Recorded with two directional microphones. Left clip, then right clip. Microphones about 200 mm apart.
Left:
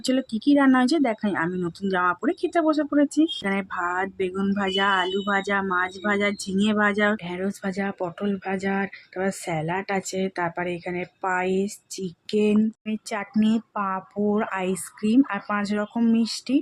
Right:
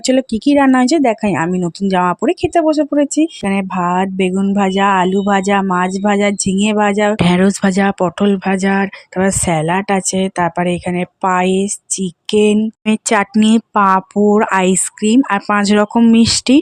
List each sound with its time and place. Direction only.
0.0 s speech: 30° right (ahead or behind)
7.2 s speech: 50° right (ahead or behind)